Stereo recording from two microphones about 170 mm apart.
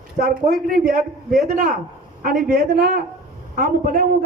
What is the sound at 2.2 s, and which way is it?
A woman's voice, 55° right (ahead or behind).